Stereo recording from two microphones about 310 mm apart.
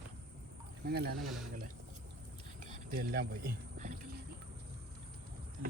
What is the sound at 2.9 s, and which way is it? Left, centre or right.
Speech, right.